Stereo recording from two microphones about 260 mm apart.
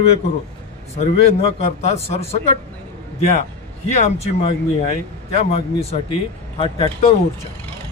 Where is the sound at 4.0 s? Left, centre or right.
Left.